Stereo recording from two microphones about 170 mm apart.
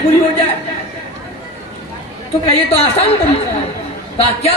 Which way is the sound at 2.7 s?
35° left (ahead or behind).